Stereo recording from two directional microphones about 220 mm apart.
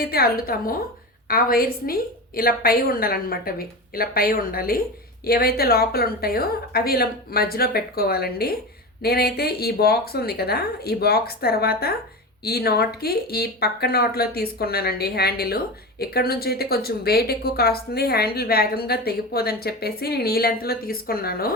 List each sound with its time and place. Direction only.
0.0 s speech: 40° left (ahead or behind)